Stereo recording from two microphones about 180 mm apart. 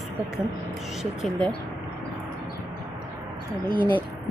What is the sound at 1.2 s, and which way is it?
Speech, 5° left (ahead or behind).